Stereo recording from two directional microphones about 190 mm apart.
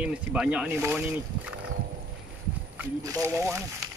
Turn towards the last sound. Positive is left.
turn(degrees=-15)  # may be behind; listen again after turning